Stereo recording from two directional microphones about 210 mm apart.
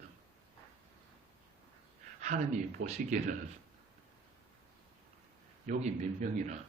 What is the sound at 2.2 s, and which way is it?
Speech, 35° right (ahead or behind).